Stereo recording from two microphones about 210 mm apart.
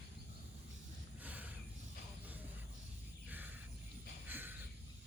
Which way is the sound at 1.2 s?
5° right (ahead or behind).